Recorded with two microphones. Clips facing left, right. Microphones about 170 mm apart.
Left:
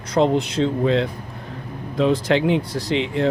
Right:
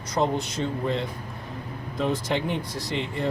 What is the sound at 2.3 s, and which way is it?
Speech, 90° left.